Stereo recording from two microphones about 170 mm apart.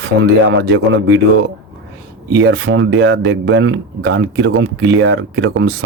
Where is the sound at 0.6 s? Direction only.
90° right.